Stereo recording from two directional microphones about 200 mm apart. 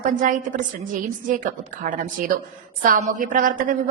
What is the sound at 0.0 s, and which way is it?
A woman's voice, 40° right (ahead or behind).